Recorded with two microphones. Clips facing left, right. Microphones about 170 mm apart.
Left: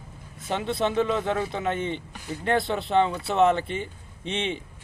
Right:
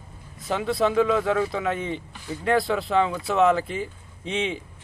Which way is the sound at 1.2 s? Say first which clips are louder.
Right 3 dB; 25° left (ahead or behind).